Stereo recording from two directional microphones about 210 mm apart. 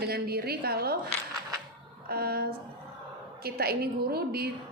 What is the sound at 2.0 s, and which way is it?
A woman's voice, 45° right (ahead or behind).